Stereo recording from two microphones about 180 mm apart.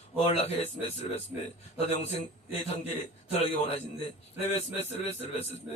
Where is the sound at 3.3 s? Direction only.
35° left (ahead or behind).